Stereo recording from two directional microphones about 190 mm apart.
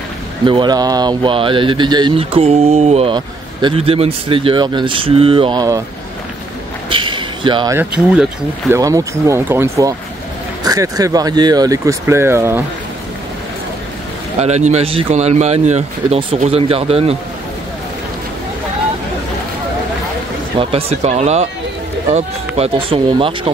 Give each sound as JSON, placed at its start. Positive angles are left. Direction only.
{"t": 0.5, "sound": "speech", "side_deg": -25}
{"t": 6.9, "sound": "a sound", "side_deg": -25}
{"t": 7.7, "sound": "speech", "side_deg": -5}
{"t": 14.4, "sound": "speech", "side_deg": -35}
{"t": 20.5, "sound": "speech", "side_deg": -35}